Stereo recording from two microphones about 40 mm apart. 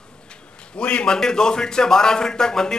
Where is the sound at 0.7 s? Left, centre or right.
Left.